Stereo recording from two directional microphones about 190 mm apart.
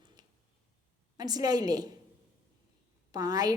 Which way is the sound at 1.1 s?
20° right (ahead or behind).